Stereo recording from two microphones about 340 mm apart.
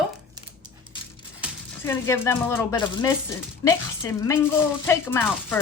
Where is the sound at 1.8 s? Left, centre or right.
Centre.